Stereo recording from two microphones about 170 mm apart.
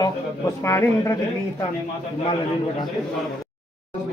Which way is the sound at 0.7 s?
15° left (ahead or behind).